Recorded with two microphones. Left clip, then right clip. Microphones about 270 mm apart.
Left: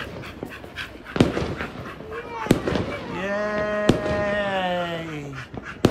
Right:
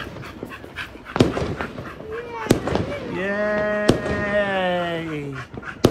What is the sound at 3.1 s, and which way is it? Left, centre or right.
Speech, centre.